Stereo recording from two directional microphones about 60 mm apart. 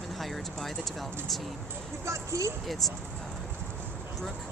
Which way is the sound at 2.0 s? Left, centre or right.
Right.